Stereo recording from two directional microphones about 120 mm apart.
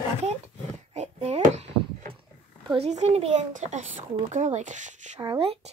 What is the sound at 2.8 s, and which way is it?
A child's voice, 65° right (ahead or behind).